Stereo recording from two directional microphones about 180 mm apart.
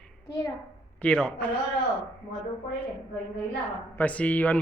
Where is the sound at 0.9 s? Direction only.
5° left (ahead or behind).